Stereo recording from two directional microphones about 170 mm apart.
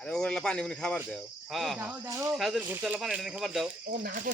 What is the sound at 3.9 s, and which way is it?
Speech, 55° right (ahead or behind).